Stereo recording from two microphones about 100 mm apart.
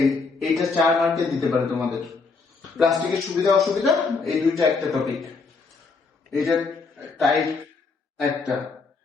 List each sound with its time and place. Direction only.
0.0 s a man's voice: centre (ahead or behind)
6.3 s a man's voice: centre (ahead or behind)